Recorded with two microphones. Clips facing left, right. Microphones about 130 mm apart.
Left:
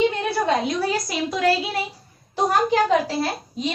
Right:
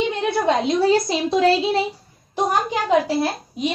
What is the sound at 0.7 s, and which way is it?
A woman's voice, 25° right (ahead or behind).